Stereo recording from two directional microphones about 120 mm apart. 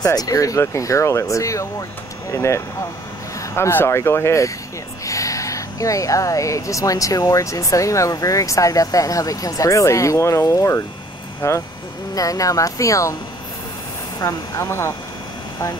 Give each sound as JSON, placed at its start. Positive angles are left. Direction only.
{"t": 0.0, "sound": "speech", "side_deg": 30}
{"t": 14.2, "sound": "speech", "side_deg": 25}